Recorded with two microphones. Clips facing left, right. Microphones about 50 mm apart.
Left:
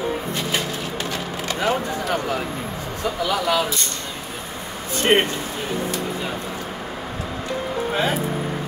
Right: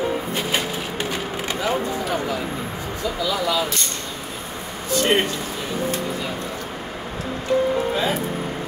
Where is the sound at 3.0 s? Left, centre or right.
Left.